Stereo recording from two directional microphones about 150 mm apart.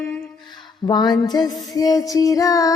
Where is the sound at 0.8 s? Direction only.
30° left (ahead or behind).